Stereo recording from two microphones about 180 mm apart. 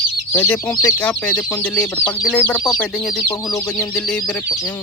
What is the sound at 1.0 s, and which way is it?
Speech, 10° left (ahead or behind).